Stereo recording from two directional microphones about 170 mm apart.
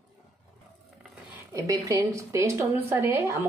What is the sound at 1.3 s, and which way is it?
Speech, 20° right (ahead or behind).